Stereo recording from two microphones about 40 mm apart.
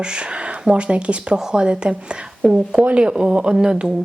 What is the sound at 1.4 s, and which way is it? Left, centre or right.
Speech, centre.